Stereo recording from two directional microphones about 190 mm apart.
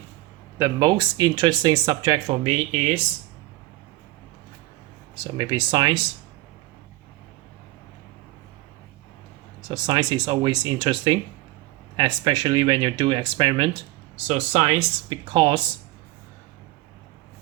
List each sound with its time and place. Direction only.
0.6 s speech: 20° right (ahead or behind)
5.2 s speech: 25° right (ahead or behind)
9.6 s speech: 25° right (ahead or behind)
14.3 s speech: 35° right (ahead or behind)